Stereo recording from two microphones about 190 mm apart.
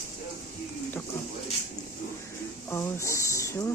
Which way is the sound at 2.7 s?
15° left (ahead or behind).